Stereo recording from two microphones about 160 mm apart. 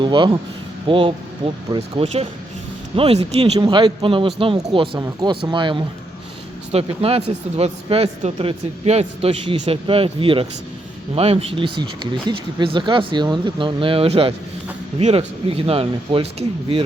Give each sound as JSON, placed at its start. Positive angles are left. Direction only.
{"t": 0.0, "sound": "speech", "side_deg": -30}
{"t": 3.6, "sound": "speech", "side_deg": -30}